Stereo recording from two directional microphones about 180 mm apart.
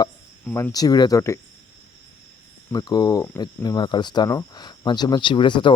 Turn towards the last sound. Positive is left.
turn(degrees=25)  # may be behind; listen again after turning